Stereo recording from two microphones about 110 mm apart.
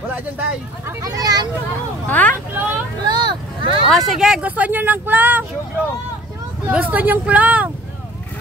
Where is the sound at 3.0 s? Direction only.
40° right (ahead or behind).